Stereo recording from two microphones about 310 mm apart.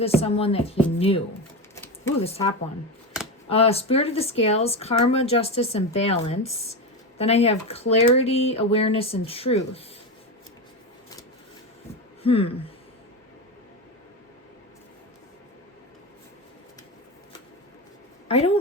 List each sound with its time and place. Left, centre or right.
0.0 s speech: centre
2.2 s speech: centre
3.5 s speech: centre
12.2 s speech: centre
18.3 s a woman's voice: centre